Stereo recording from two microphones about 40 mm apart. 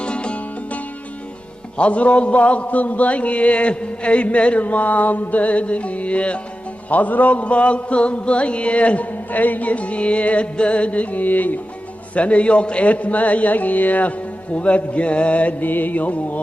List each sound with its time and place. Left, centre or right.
0.0 s music: left
1.8 s mantra: left
6.9 s mantra: left
12.1 s mantra: left
14.5 s mantra: left
15.6 s music: left